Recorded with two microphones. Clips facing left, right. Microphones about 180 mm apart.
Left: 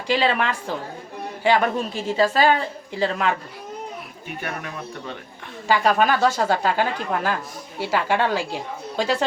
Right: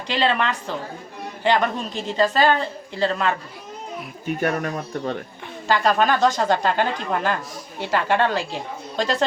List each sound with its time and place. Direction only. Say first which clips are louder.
0.1 s a woman's voice: left 1 dB; 10° left (ahead or behind)
4.4 s speech: right 7 dB; 45° right (ahead or behind)
5.6 s a woman's voice: even; 10° left (ahead or behind)